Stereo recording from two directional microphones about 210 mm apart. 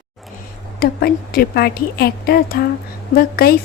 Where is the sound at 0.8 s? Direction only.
45° left (ahead or behind).